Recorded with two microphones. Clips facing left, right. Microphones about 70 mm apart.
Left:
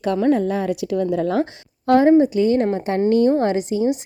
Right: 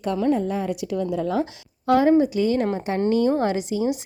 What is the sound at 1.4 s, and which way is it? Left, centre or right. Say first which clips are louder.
A woman's voice: left 3 dB; left.